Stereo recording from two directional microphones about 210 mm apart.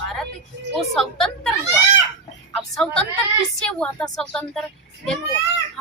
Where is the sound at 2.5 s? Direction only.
5° left (ahead or behind).